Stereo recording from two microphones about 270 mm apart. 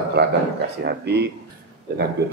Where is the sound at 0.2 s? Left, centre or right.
Right.